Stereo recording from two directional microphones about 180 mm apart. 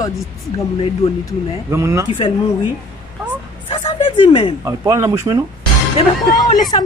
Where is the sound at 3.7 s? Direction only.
30° left (ahead or behind).